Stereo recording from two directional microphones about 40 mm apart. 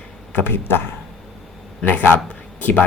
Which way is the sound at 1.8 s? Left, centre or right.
Left.